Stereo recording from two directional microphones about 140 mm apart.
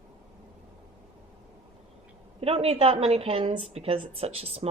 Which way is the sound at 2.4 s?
45° right (ahead or behind).